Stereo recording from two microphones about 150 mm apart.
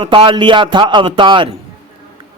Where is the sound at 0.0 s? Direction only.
35° right (ahead or behind).